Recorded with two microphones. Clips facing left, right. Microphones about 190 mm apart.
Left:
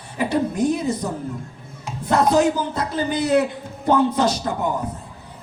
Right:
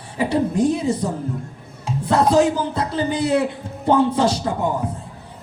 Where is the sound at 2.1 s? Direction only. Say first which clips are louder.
Right 1 dB; 30° right (ahead or behind).